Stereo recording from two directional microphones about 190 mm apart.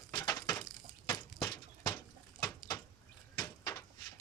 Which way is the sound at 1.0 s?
20° left (ahead or behind).